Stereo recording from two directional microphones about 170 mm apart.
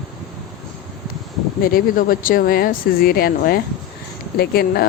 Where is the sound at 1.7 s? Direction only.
55° left (ahead or behind).